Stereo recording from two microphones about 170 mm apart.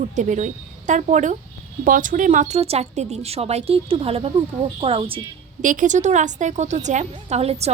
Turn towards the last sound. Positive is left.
turn(degrees=-35)  # may be behind; listen again after turning